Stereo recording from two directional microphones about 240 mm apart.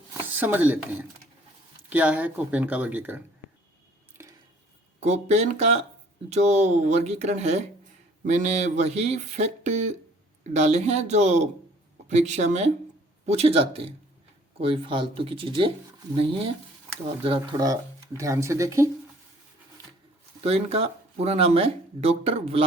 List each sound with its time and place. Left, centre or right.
0.3 s speech: centre
4.2 s a sound: centre
4.9 s speech: right; by 18.9 s centre
20.4 s speech: right